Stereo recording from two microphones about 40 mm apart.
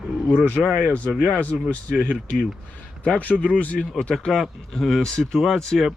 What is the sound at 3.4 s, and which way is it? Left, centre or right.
Speech, left.